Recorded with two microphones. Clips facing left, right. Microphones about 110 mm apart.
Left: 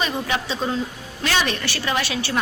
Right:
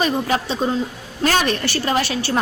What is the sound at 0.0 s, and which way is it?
A woman's voice, 40° right (ahead or behind).